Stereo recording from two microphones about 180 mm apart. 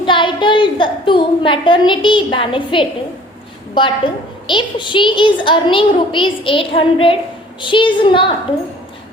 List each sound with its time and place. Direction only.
0.0 s a woman's voice: 25° left (ahead or behind)